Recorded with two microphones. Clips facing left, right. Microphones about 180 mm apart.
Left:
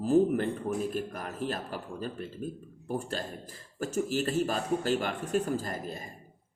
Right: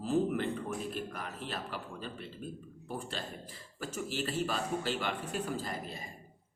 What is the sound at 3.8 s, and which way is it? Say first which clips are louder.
A man's voice: left 7 dB; 45° left (ahead or behind).